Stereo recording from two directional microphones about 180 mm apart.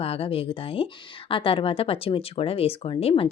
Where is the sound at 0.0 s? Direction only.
30° left (ahead or behind).